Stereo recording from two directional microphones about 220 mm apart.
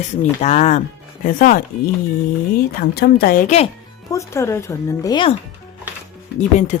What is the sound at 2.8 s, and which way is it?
Speech, 45° left (ahead or behind).